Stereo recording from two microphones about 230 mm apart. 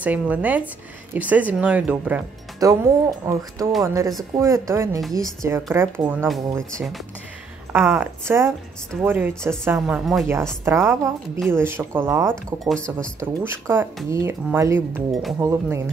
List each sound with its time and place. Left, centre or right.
0.0 s speech: centre
7.7 s a woman's voice: centre
12.6 s a woman's voice: centre
13.5 s speech: centre